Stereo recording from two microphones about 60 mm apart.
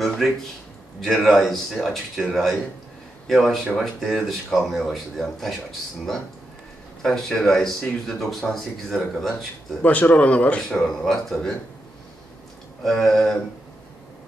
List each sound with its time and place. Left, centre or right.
1.0 s speech: centre
9.8 s speech: left
11.1 s speech: centre
12.8 s speech: centre